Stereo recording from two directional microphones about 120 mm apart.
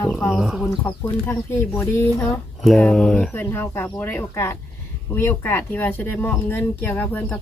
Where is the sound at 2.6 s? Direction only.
5° left (ahead or behind).